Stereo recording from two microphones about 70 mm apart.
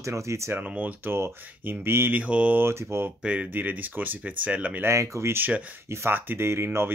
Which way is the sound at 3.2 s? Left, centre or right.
Centre.